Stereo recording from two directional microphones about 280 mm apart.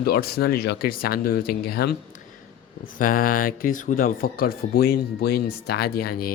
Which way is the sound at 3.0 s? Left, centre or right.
Left.